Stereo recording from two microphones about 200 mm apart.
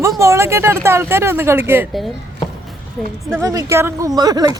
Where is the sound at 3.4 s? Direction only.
15° right (ahead or behind).